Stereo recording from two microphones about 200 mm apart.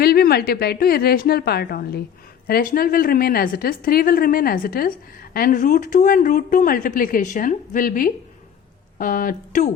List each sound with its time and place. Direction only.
0.0 s a woman's voice: 50° left (ahead or behind)